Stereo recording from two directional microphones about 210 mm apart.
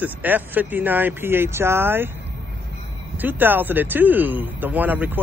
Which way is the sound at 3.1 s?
10° right (ahead or behind).